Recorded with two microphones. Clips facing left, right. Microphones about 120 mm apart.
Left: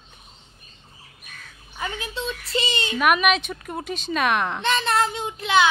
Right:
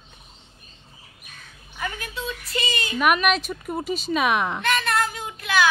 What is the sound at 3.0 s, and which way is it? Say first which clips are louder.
A woman's voice: left 1 dB; centre (ahead or behind).